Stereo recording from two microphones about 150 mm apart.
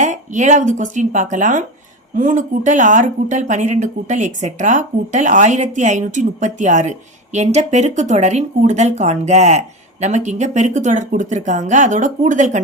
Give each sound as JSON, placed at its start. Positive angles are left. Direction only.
{"t": 0.0, "sound": "speech", "side_deg": -55}